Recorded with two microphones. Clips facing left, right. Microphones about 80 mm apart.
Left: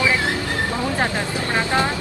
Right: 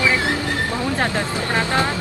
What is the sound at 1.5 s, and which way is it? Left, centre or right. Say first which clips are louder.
Speech: even; left.